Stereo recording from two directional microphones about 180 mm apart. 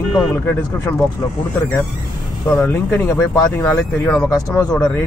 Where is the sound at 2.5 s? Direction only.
15° left (ahead or behind).